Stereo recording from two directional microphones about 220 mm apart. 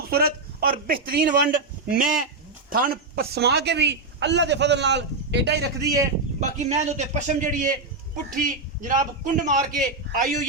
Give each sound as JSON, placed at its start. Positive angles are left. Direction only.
{"t": 0.0, "sound": "a sound", "side_deg": -45}
{"t": 1.0, "sound": "a man's voice", "side_deg": -40}
{"t": 5.8, "sound": "speech", "side_deg": -15}
{"t": 6.4, "sound": "a man's voice", "side_deg": -30}